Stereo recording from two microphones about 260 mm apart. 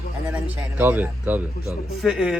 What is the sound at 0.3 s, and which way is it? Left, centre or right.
Speech, centre.